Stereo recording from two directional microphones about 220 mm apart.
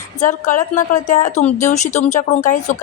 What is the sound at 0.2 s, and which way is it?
Speech, 35° left (ahead or behind).